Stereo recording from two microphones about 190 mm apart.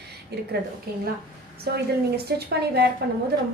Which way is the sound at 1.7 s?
55° right (ahead or behind).